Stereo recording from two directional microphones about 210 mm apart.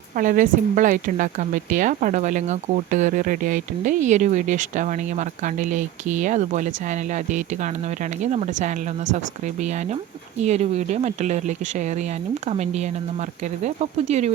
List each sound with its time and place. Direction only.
0.2 s speech: 40° right (ahead or behind)